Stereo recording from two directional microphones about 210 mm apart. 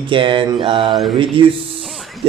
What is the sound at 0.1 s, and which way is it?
A man's voice, 25° right (ahead or behind).